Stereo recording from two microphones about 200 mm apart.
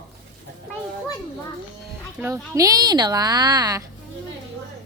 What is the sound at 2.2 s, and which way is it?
Speech, 15° right (ahead or behind).